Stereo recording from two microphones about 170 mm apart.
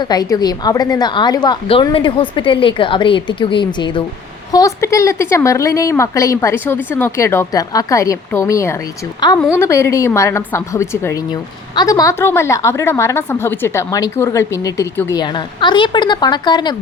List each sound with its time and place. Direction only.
0.0 s a woman's voice: 25° left (ahead or behind)
15.2 s a woman's voice: 25° left (ahead or behind)